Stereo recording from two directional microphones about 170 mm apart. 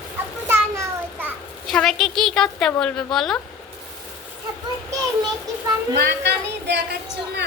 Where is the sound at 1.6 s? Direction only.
Centre (ahead or behind).